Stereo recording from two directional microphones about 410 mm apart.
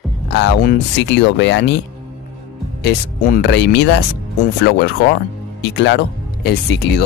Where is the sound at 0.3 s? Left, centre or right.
Left.